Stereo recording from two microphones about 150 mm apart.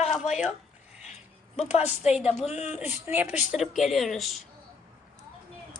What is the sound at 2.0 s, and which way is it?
Speech, 45° left (ahead or behind).